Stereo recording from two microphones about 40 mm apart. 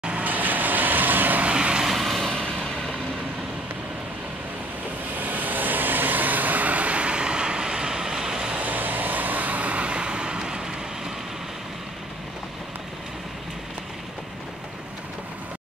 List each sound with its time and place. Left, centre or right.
0.2 s vehicle: right
1.4 s vehicle: right
1.8 s vehicle: centre
2.2 s vehicle: centre
5.1 s vehicle: right
8.5 s vehicle: right